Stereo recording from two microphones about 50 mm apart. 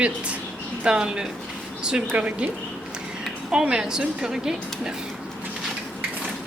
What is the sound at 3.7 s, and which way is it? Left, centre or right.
A woman's voice, centre.